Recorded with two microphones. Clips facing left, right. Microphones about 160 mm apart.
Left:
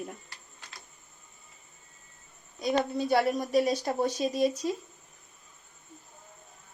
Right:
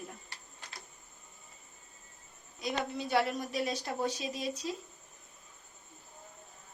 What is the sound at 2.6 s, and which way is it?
A woman's voice, 40° left (ahead or behind).